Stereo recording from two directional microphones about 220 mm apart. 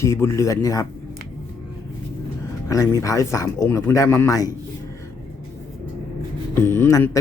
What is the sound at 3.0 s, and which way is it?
Speech, 15° left (ahead or behind).